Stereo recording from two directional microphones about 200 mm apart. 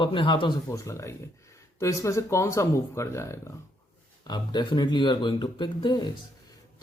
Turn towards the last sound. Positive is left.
turn(degrees=20)  # may be behind; listen again after turning